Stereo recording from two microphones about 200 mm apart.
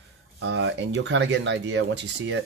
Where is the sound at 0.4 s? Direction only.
60° right (ahead or behind).